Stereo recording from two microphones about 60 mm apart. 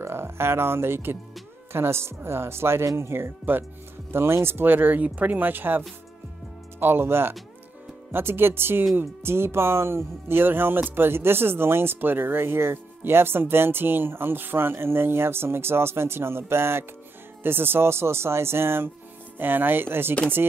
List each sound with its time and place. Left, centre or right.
0.0 s speech: right